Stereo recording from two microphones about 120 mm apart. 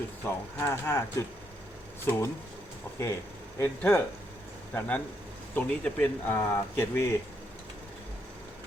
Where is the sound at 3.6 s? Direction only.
20° left (ahead or behind).